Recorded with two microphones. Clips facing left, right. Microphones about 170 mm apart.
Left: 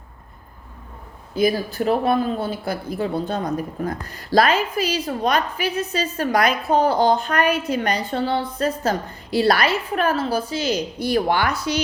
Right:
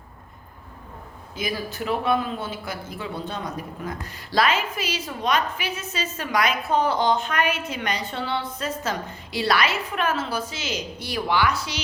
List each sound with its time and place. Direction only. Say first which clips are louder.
1.4 s a woman's voice: left 9 dB; 40° left (ahead or behind)
11.3 s a woman's voice: left 3 dB; 50° left (ahead or behind)